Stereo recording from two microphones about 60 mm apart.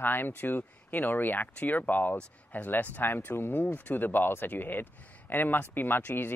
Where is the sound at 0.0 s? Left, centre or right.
Left.